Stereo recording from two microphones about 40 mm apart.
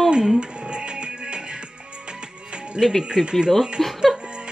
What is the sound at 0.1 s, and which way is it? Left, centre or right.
Music, right.